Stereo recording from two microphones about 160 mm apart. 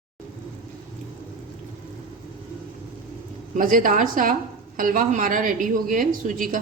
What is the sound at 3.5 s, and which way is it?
A woman's voice, 55° right (ahead or behind).